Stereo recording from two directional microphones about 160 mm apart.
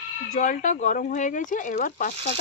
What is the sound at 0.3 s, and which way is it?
Speech, 50° left (ahead or behind).